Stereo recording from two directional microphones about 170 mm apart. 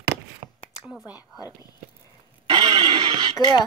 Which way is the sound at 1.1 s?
20° left (ahead or behind).